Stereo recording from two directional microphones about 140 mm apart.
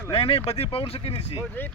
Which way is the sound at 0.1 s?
45° left (ahead or behind).